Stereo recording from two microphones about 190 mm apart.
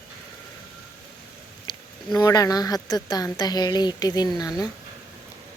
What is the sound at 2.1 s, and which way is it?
Speech, 20° left (ahead or behind).